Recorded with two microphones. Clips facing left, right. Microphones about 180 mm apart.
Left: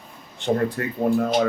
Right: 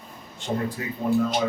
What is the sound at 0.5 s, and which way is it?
Speech, 60° left (ahead or behind).